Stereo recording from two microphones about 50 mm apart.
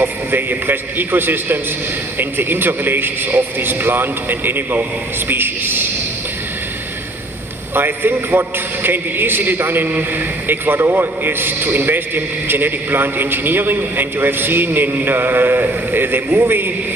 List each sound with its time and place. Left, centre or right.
0.5 s a man's voice: right
7.7 s a man's voice: right